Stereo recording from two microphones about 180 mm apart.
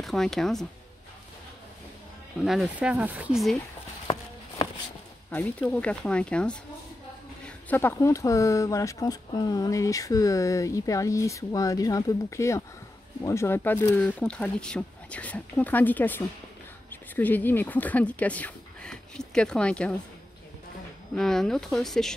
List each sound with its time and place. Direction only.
0.0 s speech: centre (ahead or behind)
2.4 s speech: 5° right (ahead or behind)
5.3 s speech: 10° left (ahead or behind)
21.1 s speech: centre (ahead or behind)